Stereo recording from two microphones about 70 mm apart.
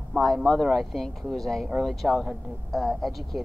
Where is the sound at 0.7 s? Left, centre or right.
Centre.